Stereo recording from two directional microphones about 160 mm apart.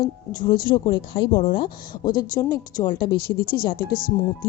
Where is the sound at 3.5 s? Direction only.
70° left (ahead or behind).